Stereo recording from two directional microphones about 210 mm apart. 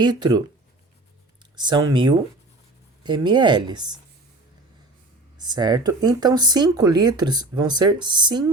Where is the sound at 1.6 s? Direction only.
20° right (ahead or behind).